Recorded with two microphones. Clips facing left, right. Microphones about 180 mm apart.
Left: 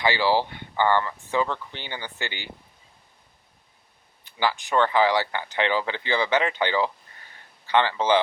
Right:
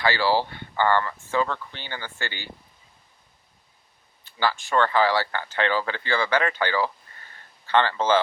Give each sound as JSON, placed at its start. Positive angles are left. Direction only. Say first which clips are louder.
{"t": 0.0, "sound": "speech", "louder": "even", "side_deg": 15}
{"t": 4.2, "sound": "speech", "louder": "even", "side_deg": 15}